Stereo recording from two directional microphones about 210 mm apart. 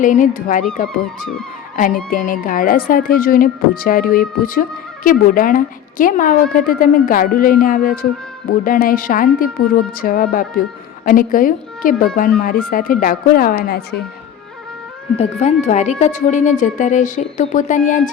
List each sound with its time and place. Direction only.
0.0 s a woman's voice: 40° left (ahead or behind)
2.0 s a woman's voice: 40° left (ahead or behind)
15.2 s a woman's voice: 30° left (ahead or behind)